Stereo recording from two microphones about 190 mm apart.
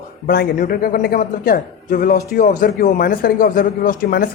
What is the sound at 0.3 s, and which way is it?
A man's voice, 50° left (ahead or behind).